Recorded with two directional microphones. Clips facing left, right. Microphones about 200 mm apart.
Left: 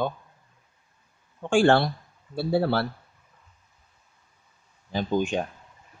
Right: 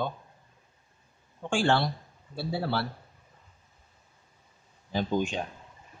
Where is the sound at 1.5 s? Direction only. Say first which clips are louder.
Left 6 dB; 55° left (ahead or behind).